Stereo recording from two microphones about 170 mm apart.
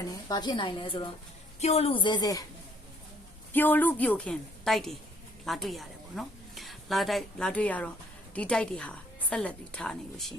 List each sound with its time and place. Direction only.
0.0 s a woman's voice: 20° left (ahead or behind)
3.5 s a woman's voice: 10° left (ahead or behind)